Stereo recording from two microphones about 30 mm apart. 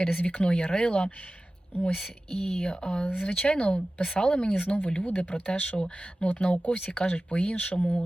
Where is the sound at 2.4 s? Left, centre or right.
Left.